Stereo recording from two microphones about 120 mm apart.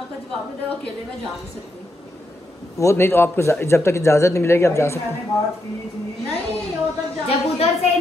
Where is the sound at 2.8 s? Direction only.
20° left (ahead or behind).